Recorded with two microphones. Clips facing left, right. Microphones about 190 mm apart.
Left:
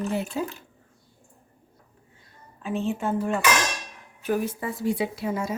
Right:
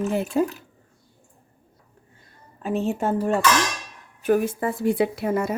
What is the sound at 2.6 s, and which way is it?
Speech, 40° right (ahead or behind).